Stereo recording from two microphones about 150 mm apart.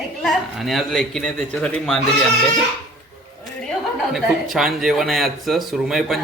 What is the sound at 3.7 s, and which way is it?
Speech, centre (ahead or behind).